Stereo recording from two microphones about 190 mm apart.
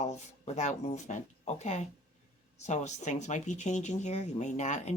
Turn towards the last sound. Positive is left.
turn(degrees=35)  # may be behind; listen again after turning